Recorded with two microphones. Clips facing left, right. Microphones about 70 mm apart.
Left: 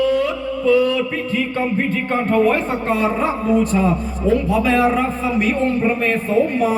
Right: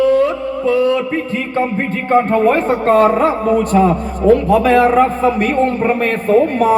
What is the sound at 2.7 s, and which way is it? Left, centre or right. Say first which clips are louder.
A man's voice: right 8 dB; right.